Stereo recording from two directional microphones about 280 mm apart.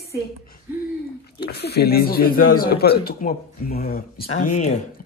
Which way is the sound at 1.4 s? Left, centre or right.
Left.